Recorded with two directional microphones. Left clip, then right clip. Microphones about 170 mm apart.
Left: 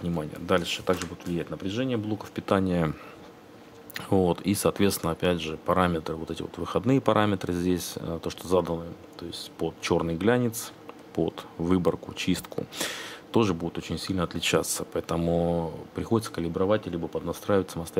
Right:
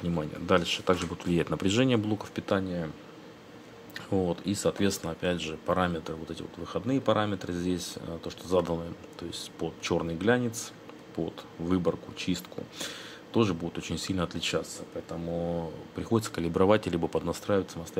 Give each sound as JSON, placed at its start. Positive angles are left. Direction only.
{"t": 0.0, "sound": "speech", "side_deg": 5}
{"t": 1.1, "sound": "speech", "side_deg": -15}
{"t": 2.0, "sound": "speech", "side_deg": 0}
{"t": 3.9, "sound": "speech", "side_deg": 25}
{"t": 14.6, "sound": "speech", "side_deg": 45}
{"t": 16.5, "sound": "speech", "side_deg": -10}
{"t": 17.3, "sound": "speech", "side_deg": 20}